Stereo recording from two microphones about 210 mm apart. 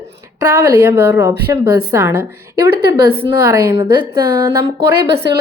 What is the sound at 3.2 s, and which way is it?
Speech, 15° right (ahead or behind).